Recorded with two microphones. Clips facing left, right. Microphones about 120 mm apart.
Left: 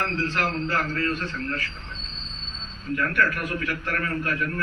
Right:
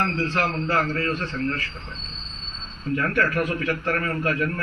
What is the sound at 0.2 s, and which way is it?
Speech, 35° right (ahead or behind).